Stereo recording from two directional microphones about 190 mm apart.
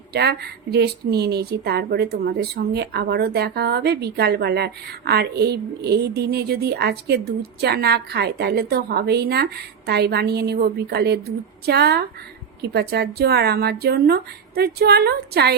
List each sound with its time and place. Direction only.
0.1 s a woman's voice: 60° right (ahead or behind)